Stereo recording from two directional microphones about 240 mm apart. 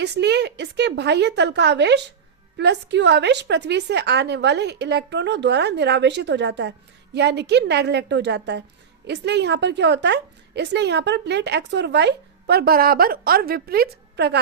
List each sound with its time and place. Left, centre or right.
0.0 s a woman's voice: right